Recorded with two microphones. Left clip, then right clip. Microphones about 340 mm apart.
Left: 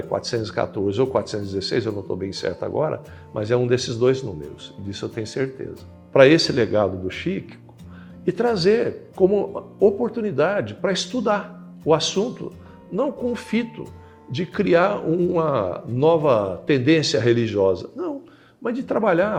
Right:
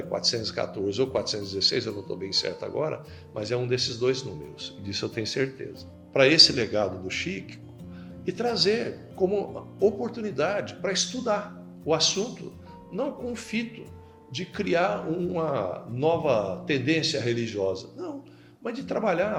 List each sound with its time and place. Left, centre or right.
0.1 s speech: left
3.4 s speech: left
4.9 s speech: centre
6.1 s speech: left